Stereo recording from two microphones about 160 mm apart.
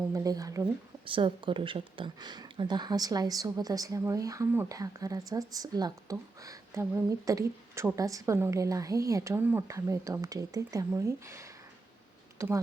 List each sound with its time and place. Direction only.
0.1 s speech: 20° right (ahead or behind)
1.0 s speech: 30° right (ahead or behind)